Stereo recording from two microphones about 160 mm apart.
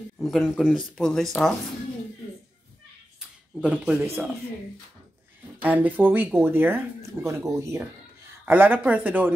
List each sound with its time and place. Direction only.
0.2 s speech: centre (ahead or behind)
3.2 s a sound: 5° right (ahead or behind)
5.6 s speech: 10° right (ahead or behind)